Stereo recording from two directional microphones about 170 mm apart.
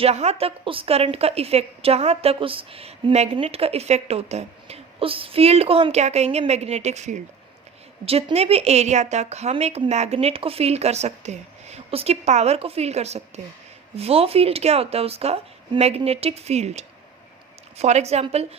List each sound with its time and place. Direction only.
0.0 s a woman's voice: 40° right (ahead or behind)